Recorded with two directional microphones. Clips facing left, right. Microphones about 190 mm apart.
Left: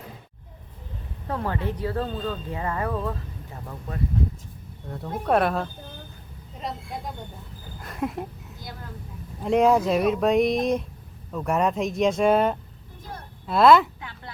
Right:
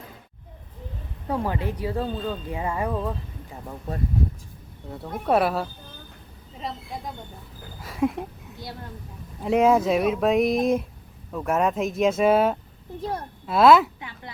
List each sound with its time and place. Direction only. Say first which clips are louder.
1.3 s speech: right 2 dB; 10° right (ahead or behind)
4.9 s speech: even; 5° right (ahead or behind)
13.0 s a sound: right 10 dB; 60° right (ahead or behind)
13.5 s speech: right 1 dB; centre (ahead or behind)